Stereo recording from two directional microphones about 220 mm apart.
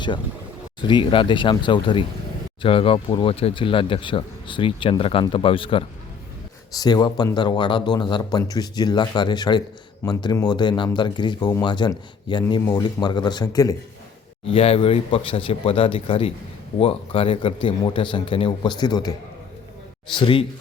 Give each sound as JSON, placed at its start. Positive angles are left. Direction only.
{"t": 0.8, "sound": "speech", "side_deg": 20}
{"t": 14.4, "sound": "speech", "side_deg": 25}
{"t": 20.1, "sound": "speech", "side_deg": 20}